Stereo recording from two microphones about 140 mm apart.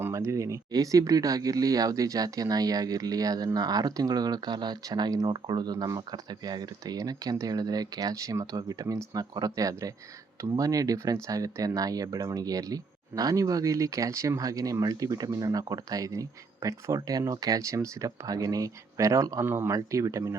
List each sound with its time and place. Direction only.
0.0 s speech: 20° right (ahead or behind)